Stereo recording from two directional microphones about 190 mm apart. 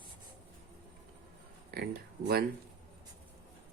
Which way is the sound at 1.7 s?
55° right (ahead or behind).